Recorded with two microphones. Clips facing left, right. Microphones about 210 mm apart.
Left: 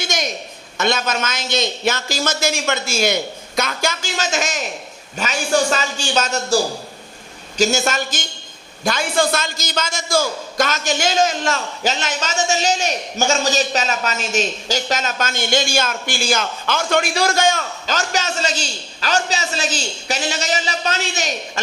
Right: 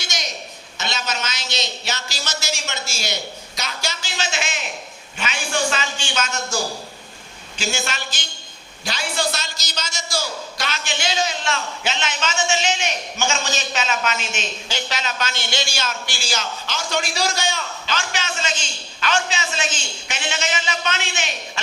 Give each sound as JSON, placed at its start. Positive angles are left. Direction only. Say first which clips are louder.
{"t": 0.0, "sound": "a sound", "louder": "left 8 dB", "side_deg": 55}
{"t": 0.8, "sound": "a man's voice", "louder": "left 8 dB", "side_deg": 50}
{"t": 7.6, "sound": "a man's voice", "louder": "left 9 dB", "side_deg": 45}